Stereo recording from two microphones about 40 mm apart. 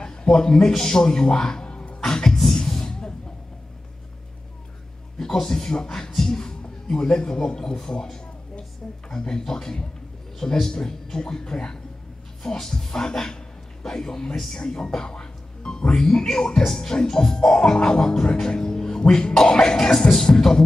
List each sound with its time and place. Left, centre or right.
0.0 s a man's voice: centre
1.7 s music: left
2.0 s speech: centre
2.5 s music: centre
5.2 s a man's voice: centre
14.3 s speech: centre
14.6 s music: centre
15.9 s speech: centre
20.0 s speech: centre